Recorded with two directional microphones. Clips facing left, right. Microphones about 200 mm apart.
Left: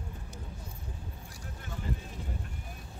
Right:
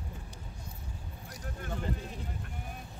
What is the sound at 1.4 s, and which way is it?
Vehicle, 55° right (ahead or behind).